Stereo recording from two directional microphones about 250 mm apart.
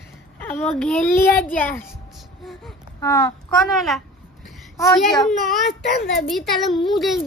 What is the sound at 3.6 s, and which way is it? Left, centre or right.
Speech, centre.